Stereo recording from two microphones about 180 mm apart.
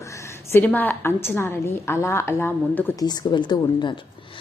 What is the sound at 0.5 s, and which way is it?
A woman's voice, 10° left (ahead or behind).